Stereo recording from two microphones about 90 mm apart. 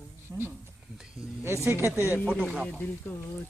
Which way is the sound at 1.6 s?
30° right (ahead or behind).